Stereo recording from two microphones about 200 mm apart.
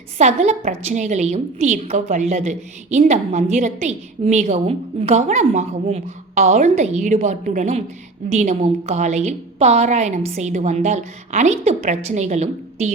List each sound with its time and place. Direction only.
0.2 s a woman's voice: 35° right (ahead or behind)